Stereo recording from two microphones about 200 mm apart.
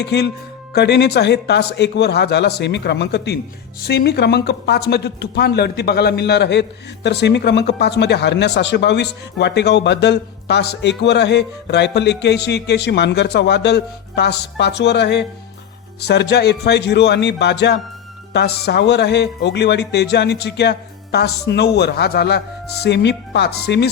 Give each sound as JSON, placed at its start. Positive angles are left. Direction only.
{"t": 0.0, "sound": "speech", "side_deg": 55}